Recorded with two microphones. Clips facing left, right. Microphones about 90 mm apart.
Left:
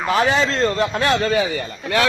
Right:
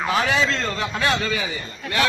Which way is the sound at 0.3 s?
35° left (ahead or behind).